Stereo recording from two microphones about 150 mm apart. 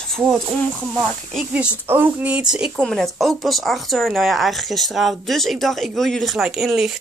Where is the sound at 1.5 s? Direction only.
10° right (ahead or behind).